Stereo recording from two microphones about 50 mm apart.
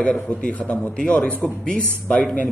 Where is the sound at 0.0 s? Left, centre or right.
Left.